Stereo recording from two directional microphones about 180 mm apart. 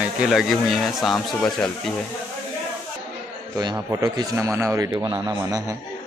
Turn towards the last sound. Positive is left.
turn(degrees=-15)  # may be behind; listen again after turning